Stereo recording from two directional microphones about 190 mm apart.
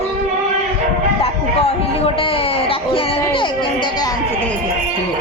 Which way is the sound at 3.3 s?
25° left (ahead or behind).